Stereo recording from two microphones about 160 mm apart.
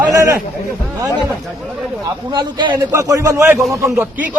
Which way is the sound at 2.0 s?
25° right (ahead or behind).